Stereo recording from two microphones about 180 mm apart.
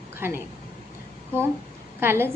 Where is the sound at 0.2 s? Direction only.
10° right (ahead or behind).